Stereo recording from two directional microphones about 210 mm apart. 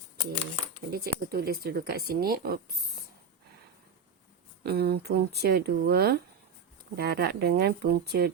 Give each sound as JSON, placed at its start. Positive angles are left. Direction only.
{"t": 0.9, "sound": "speech", "side_deg": -45}
{"t": 4.6, "sound": "speech", "side_deg": -50}